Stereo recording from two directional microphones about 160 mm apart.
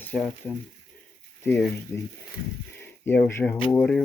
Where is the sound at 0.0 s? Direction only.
10° left (ahead or behind).